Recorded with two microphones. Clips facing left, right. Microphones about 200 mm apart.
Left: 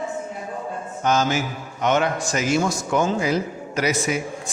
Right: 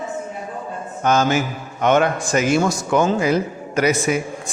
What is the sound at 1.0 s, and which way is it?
A man's voice, 55° right (ahead or behind).